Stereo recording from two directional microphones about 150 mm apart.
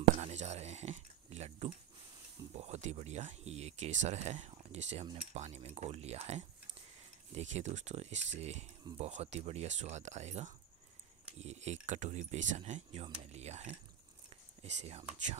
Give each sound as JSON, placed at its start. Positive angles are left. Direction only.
{"t": 0.2, "sound": "speech", "side_deg": -50}